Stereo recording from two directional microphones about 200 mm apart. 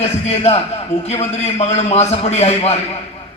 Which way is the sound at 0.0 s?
30° left (ahead or behind).